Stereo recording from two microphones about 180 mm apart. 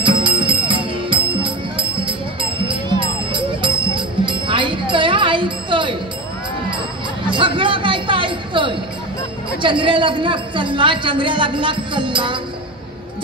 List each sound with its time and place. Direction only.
0.0 s music: 25° right (ahead or behind)
7.2 s a sound: 25° right (ahead or behind)
9.6 s a woman's voice: 25° right (ahead or behind)